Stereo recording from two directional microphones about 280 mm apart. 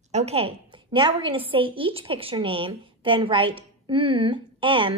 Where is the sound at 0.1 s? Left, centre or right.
Right.